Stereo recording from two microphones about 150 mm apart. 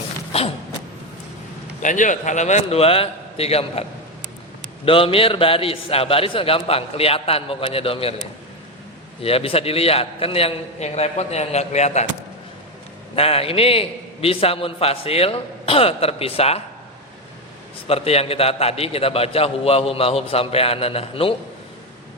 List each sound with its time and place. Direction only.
1.8 s a man's voice: 55° left (ahead or behind)
4.9 s a man's voice: 35° left (ahead or behind)
9.2 s a man's voice: 40° left (ahead or behind)
13.1 s a man's voice: 40° left (ahead or behind)
17.8 s a man's voice: 40° left (ahead or behind)